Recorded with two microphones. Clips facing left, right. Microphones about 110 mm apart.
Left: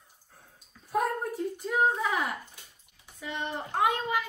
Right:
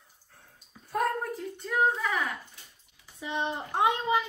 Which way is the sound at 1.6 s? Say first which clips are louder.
Even; 5° left (ahead or behind).